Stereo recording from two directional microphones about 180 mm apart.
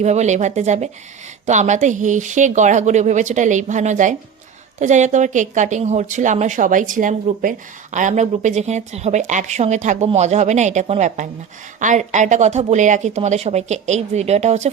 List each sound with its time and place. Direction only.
0.0 s a woman's voice: 40° right (ahead or behind)